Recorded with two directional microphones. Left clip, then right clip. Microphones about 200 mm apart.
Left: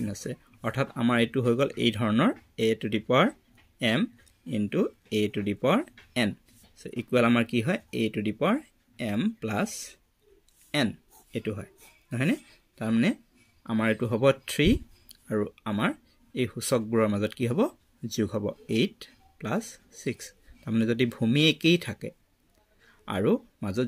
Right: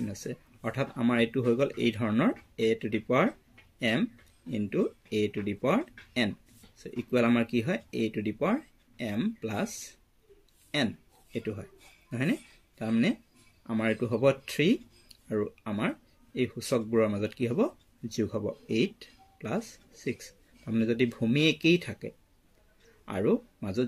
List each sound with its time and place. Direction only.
0.0 s speech: 45° left (ahead or behind)
11.3 s speech: 50° left (ahead or behind)